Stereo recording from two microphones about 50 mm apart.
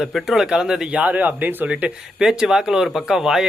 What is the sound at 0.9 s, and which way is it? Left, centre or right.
Speech, right.